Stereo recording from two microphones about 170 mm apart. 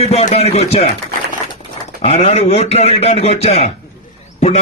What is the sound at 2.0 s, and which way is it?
A man's voice, 35° left (ahead or behind).